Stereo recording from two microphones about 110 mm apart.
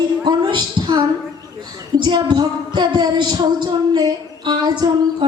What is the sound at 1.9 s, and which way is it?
Music, 45° right (ahead or behind).